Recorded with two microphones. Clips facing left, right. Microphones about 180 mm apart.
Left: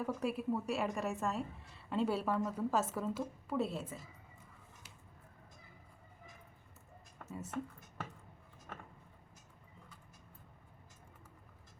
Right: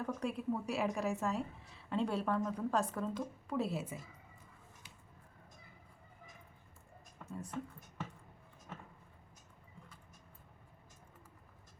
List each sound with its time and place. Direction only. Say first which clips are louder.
0.0 s a woman's voice: left 1 dB; 5° left (ahead or behind)
7.3 s speech: even; 5° left (ahead or behind)